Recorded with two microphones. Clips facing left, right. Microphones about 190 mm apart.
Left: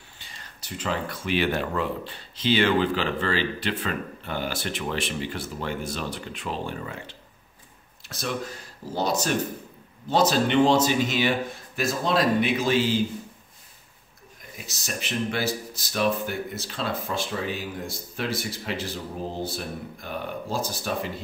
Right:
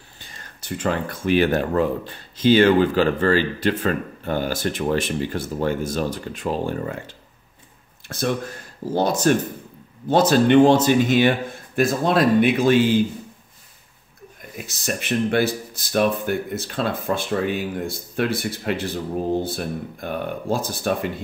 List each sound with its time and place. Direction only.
0.2 s speech: 50° right (ahead or behind)
14.6 s speech: 55° right (ahead or behind)